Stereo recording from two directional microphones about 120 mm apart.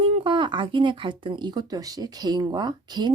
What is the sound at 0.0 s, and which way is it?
Speech, 45° right (ahead or behind).